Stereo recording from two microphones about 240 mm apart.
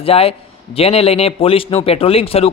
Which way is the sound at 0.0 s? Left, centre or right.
Left.